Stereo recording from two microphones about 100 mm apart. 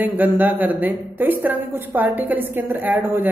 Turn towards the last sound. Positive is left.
turn(degrees=-20)  # may be behind; listen again after turning